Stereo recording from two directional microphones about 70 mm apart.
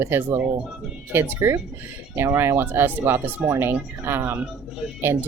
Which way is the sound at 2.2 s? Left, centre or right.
Right.